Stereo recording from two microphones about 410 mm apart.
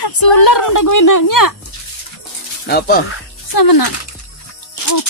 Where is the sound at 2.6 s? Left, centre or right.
Left.